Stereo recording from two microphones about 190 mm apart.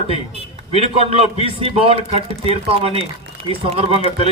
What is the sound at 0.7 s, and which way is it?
A man's voice, 30° right (ahead or behind).